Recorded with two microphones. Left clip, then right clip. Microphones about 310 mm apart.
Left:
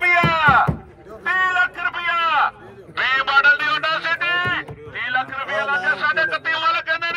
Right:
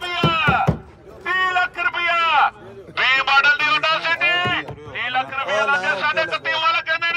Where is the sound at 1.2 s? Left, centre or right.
Centre.